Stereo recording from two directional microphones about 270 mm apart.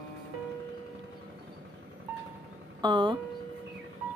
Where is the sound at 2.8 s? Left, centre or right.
Centre.